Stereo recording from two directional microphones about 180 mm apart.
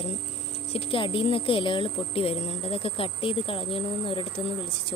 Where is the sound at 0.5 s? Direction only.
35° left (ahead or behind).